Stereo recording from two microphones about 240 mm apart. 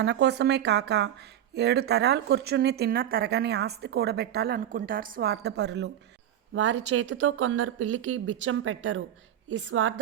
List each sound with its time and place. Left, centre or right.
0.0 s speech: right